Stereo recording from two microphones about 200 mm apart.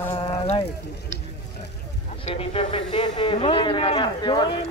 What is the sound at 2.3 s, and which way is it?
Speech, 30° left (ahead or behind).